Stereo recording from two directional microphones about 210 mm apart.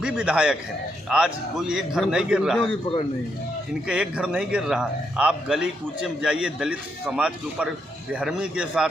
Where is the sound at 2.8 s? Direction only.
25° left (ahead or behind).